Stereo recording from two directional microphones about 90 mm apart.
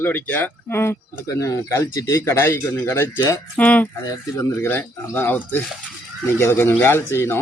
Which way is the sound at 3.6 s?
15° left (ahead or behind).